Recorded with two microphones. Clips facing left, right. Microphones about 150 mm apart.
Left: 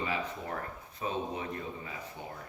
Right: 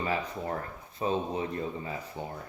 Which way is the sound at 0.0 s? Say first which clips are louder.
Right 3 dB; 40° right (ahead or behind).